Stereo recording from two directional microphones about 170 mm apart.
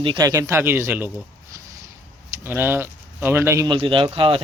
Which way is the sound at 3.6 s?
30° right (ahead or behind).